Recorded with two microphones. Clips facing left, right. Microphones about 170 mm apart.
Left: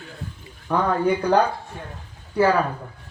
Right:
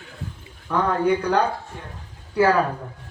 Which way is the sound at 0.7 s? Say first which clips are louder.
Left 1 dB; 15° left (ahead or behind).